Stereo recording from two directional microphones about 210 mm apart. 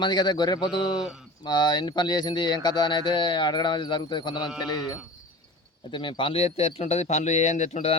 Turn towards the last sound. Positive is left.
turn(degrees=30)  # may be behind; listen again after turning